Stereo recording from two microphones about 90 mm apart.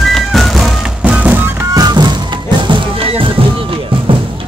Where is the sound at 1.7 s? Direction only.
50° right (ahead or behind).